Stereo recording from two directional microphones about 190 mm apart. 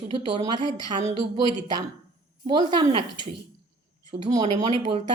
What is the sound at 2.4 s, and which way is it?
Speech, 30° right (ahead or behind).